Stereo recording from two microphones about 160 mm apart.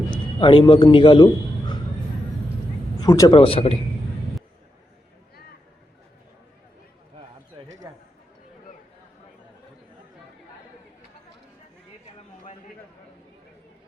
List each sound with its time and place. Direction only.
0.3 s a man's voice: 30° left (ahead or behind)
3.0 s speech: 25° left (ahead or behind)
3.3 s speech: 35° left (ahead or behind)